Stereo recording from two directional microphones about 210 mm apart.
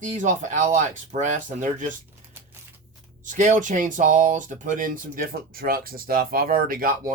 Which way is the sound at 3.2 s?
35° right (ahead or behind).